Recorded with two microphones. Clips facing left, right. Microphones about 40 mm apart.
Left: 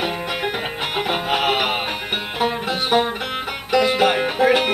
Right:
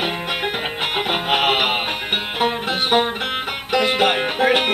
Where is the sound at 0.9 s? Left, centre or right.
Right.